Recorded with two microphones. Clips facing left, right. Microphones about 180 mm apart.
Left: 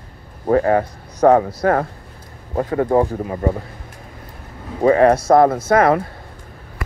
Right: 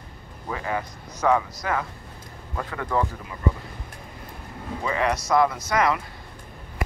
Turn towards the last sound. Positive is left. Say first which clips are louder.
# left 9 dB
turn(degrees=55)  # may be behind; listen again after turning